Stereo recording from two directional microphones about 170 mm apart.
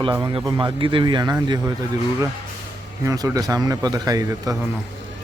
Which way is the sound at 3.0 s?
20° right (ahead or behind).